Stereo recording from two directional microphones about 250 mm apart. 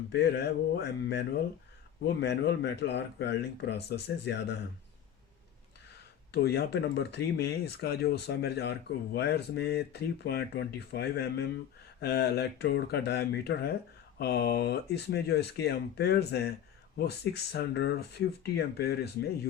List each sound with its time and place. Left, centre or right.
0.1 s speech: left
2.2 s speech: left
6.3 s speech: left